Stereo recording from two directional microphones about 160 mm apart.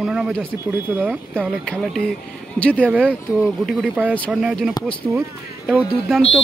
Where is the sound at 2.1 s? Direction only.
10° left (ahead or behind).